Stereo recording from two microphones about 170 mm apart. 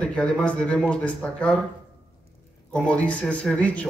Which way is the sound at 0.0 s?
5° left (ahead or behind).